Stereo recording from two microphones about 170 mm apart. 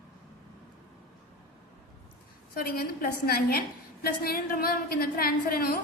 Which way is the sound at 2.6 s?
65° left (ahead or behind).